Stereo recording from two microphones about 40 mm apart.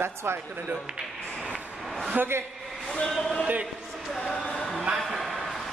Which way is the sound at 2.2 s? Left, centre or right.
Right.